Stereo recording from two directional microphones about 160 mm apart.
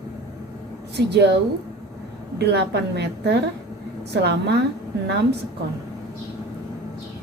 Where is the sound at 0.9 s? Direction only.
90° right.